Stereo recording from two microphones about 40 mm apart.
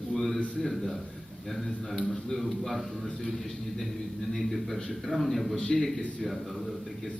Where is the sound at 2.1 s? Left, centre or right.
Centre.